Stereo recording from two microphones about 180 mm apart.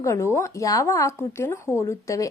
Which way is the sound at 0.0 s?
15° left (ahead or behind).